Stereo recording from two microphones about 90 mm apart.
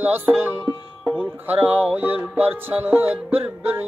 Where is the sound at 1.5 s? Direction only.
15° right (ahead or behind).